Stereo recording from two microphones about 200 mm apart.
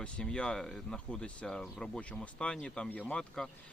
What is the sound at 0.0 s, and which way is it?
A man's voice, 5° left (ahead or behind).